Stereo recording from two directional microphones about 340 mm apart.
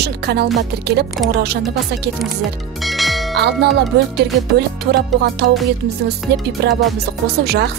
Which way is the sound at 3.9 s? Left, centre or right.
Right.